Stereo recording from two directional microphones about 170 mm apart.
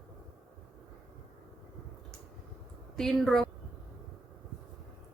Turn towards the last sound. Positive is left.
turn(degrees=0)  # may be behind; listen again after turning